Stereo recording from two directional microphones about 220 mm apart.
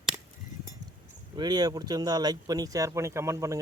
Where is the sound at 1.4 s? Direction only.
20° right (ahead or behind).